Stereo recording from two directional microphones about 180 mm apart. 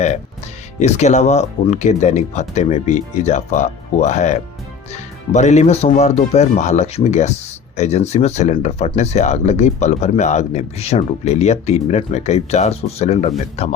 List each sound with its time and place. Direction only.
0.8 s speech: 40° left (ahead or behind)